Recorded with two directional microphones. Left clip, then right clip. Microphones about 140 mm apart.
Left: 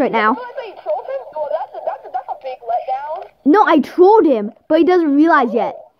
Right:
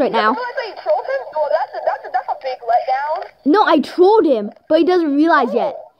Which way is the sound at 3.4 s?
90° left.